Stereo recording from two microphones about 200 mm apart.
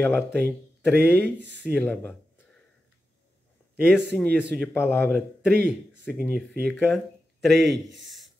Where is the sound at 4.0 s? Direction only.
10° left (ahead or behind).